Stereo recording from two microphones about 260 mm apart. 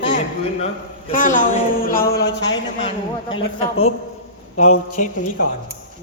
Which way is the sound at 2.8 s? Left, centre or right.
Centre.